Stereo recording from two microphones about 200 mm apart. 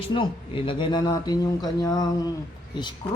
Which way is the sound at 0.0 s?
25° left (ahead or behind).